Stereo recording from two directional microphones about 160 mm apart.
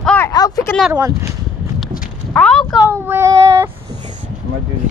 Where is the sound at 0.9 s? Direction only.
15° right (ahead or behind).